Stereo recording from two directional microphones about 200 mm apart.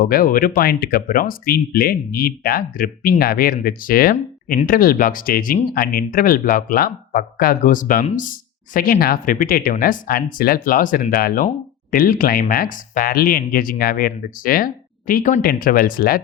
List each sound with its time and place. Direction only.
0.0 s speech: 45° left (ahead or behind)